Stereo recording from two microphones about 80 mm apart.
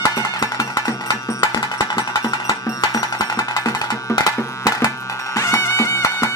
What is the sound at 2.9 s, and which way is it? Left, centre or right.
Music, left.